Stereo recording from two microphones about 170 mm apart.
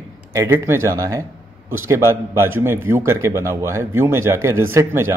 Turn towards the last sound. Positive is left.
turn(degrees=-15)  # may be behind; listen again after turning